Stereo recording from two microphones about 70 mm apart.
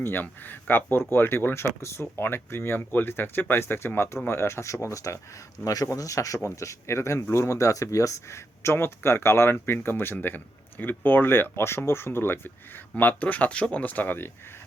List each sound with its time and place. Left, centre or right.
0.0 s speech: left